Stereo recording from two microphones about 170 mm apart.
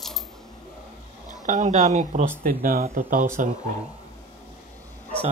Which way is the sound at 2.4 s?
55° right (ahead or behind).